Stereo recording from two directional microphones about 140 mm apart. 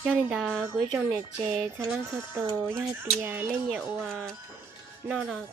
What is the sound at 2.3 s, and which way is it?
Speech, 20° right (ahead or behind).